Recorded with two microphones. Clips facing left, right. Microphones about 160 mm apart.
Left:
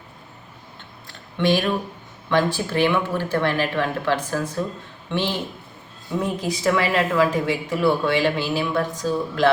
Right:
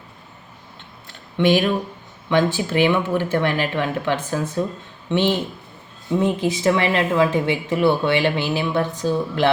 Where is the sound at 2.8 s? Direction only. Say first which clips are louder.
Right 2 dB; 20° right (ahead or behind).